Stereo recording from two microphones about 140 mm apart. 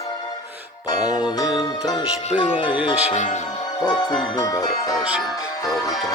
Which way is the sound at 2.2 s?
40° left (ahead or behind).